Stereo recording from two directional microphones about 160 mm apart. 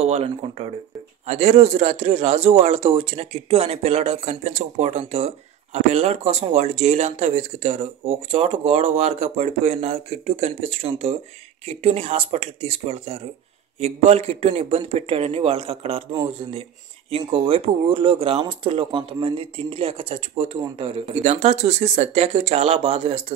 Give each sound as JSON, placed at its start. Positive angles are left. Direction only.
{"t": 0.0, "sound": "speech", "side_deg": -40}